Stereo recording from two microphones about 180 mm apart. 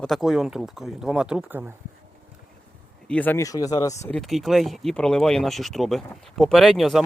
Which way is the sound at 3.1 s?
10° left (ahead or behind).